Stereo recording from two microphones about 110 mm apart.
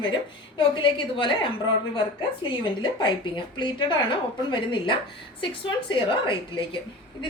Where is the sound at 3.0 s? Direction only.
45° left (ahead or behind).